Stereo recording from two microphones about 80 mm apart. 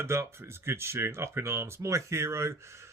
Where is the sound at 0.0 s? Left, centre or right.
Right.